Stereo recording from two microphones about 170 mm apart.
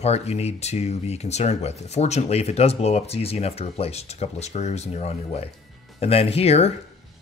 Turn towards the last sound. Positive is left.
turn(degrees=40)  # may be behind; listen again after turning